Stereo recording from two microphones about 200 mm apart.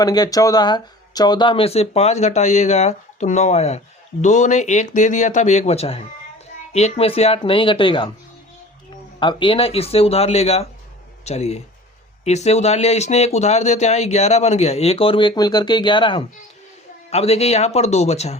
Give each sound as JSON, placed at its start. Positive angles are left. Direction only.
{"t": 0.0, "sound": "speech", "side_deg": 20}
{"t": 9.2, "sound": "speech", "side_deg": 25}